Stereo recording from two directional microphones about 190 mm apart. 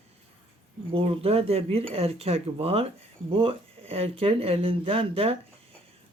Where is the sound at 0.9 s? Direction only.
30° right (ahead or behind).